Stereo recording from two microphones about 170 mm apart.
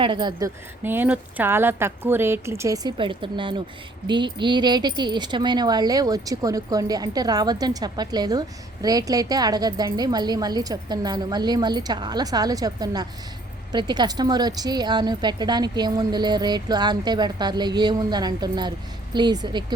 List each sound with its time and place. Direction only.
0.0 s a woman's voice: 25° right (ahead or behind)